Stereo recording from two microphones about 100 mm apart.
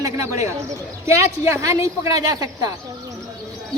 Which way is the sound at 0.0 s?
30° right (ahead or behind).